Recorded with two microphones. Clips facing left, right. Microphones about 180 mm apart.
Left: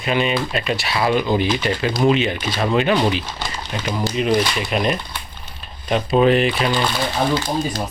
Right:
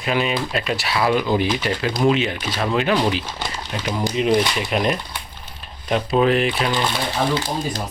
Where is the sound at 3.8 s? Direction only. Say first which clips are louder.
Even; 15° right (ahead or behind).